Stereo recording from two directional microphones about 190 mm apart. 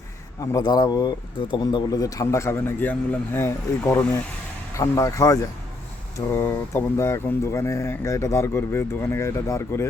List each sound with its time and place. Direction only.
0.5 s speech: 20° left (ahead or behind)